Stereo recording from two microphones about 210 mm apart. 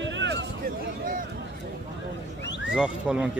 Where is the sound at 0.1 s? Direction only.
60° right (ahead or behind).